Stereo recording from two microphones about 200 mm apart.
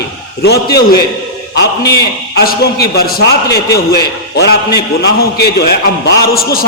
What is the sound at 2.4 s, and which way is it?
A man's voice, 50° left (ahead or behind).